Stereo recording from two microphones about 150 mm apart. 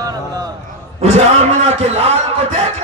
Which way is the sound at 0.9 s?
45° right (ahead or behind).